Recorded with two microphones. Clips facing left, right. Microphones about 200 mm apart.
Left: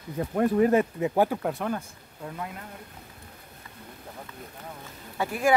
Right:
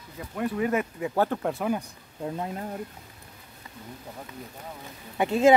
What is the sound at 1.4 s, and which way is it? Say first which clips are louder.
Speech: right 1 dB; centre (ahead or behind).